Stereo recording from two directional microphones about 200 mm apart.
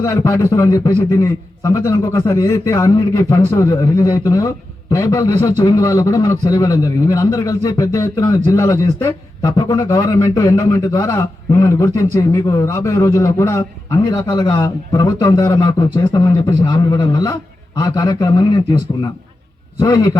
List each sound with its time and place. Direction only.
0.0 s a man's voice: 15° left (ahead or behind)